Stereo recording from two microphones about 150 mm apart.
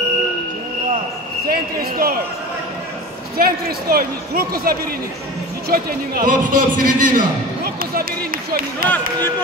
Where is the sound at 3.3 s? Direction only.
85° right.